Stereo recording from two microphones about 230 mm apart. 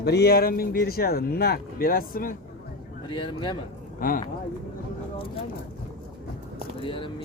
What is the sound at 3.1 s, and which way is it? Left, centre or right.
Speech, left.